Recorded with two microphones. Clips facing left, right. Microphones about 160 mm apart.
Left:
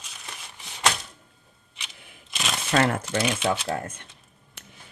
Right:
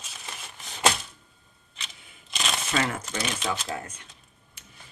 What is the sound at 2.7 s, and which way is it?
Speech, 55° left (ahead or behind).